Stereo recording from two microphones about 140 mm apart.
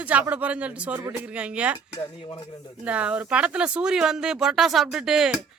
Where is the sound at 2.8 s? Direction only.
10° right (ahead or behind).